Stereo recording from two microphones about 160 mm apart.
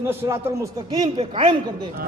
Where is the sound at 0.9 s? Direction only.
30° right (ahead or behind).